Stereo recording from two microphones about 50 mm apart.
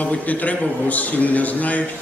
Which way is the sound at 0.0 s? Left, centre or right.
Left.